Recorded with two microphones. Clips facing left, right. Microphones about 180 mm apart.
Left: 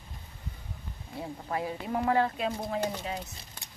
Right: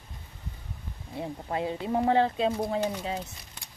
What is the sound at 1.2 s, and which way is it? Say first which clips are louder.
Speech: right 3 dB; 25° right (ahead or behind).